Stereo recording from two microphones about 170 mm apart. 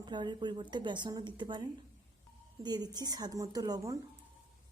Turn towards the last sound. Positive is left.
turn(degrees=-20)  # may be behind; listen again after turning